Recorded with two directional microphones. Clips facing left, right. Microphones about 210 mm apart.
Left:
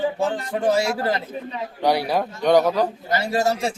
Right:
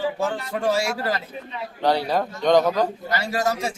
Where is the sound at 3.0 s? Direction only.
25° left (ahead or behind).